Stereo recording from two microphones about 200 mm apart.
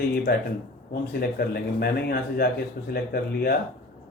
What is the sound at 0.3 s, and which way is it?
A man's voice, 50° left (ahead or behind).